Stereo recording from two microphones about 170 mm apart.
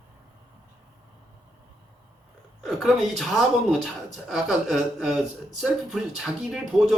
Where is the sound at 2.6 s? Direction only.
Centre (ahead or behind).